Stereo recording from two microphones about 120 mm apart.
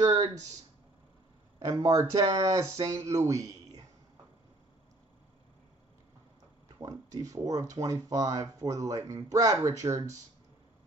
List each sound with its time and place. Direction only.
1.6 s speech: 30° right (ahead or behind)
3.3 s a sound: 30° right (ahead or behind)
6.8 s speech: 30° right (ahead or behind)